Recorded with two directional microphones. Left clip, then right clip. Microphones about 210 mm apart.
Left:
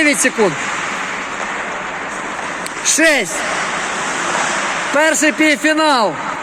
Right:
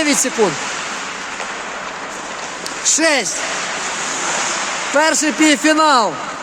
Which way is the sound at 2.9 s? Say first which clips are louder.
Left 3 dB; 10° right (ahead or behind).